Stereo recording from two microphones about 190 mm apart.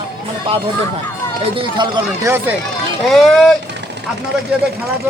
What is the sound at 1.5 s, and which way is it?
Speech, 20° right (ahead or behind).